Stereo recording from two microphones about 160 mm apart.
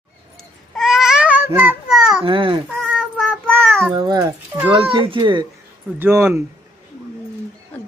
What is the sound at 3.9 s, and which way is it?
Speech, 30° right (ahead or behind).